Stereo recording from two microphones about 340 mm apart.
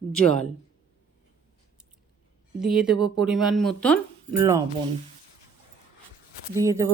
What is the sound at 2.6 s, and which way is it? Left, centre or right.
Speech, centre.